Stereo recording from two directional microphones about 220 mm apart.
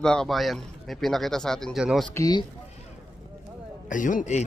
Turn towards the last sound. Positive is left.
turn(degrees=35)  # may be behind; listen again after turning